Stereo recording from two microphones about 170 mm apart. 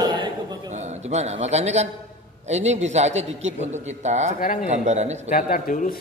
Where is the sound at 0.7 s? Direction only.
40° right (ahead or behind).